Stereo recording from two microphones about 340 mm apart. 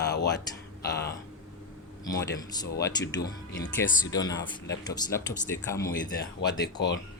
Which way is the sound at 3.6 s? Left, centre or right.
Left.